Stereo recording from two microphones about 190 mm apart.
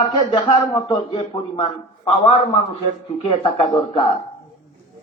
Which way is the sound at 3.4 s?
25° left (ahead or behind).